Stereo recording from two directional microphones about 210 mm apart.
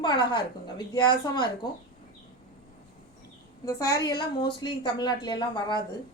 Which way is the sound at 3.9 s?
20° left (ahead or behind).